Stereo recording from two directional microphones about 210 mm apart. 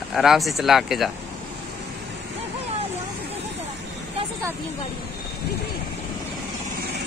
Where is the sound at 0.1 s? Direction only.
Centre (ahead or behind).